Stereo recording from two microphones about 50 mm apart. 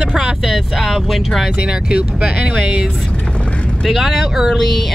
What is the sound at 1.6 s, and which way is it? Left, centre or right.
Speech, centre.